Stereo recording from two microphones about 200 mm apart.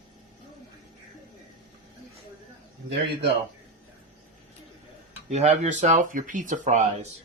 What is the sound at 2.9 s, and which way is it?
Speech, 65° right (ahead or behind).